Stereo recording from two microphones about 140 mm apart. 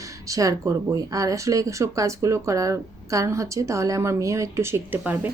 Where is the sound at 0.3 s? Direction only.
25° right (ahead or behind).